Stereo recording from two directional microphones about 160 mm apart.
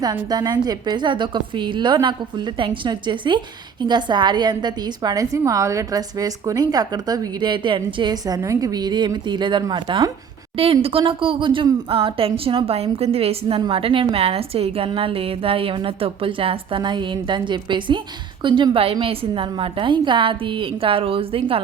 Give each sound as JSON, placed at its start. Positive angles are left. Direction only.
{"t": 0.0, "sound": "a woman's voice", "side_deg": -25}
{"t": 10.6, "sound": "a woman's voice", "side_deg": -35}